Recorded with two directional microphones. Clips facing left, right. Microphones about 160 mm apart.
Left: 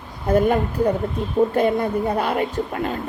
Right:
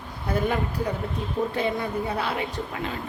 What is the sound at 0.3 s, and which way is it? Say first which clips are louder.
A woman's voice: left 8 dB; 50° left (ahead or behind).